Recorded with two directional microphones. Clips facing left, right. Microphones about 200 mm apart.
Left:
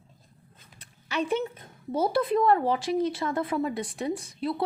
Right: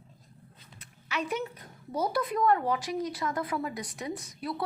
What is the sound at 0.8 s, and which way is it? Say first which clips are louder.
A woman's voice: left 4 dB; 30° left (ahead or behind).